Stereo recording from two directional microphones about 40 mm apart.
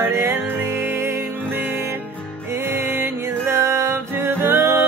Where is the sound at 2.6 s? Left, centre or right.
Right.